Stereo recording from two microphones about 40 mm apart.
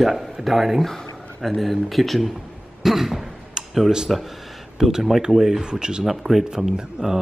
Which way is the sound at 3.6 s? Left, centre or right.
Centre.